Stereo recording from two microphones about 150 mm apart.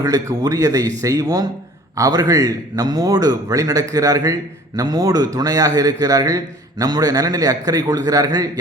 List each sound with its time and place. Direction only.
0.0 s a man's voice: 25° right (ahead or behind)